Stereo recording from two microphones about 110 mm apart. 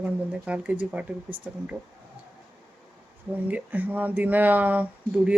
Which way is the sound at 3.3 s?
15° right (ahead or behind).